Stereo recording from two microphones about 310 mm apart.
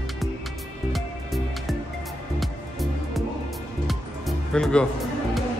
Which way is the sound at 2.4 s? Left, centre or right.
Centre.